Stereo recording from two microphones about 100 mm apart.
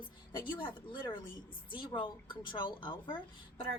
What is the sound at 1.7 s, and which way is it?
A woman's voice, 50° left (ahead or behind).